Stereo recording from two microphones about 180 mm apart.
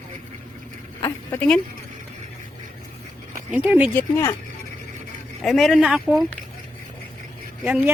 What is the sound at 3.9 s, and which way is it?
Speech, 15° left (ahead or behind).